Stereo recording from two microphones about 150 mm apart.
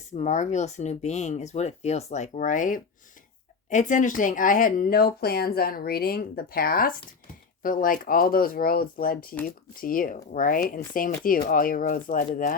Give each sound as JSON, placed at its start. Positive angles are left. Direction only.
{"t": 0.1, "sound": "speech", "side_deg": 50}